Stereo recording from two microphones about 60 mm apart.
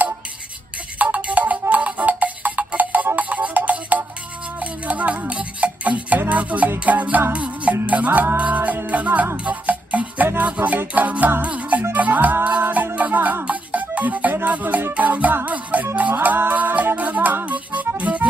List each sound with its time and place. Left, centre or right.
0.9 s music: right